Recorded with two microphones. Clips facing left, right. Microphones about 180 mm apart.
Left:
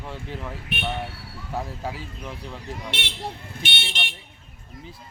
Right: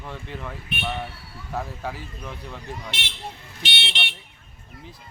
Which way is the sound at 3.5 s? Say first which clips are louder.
Left 1 dB; 50° left (ahead or behind).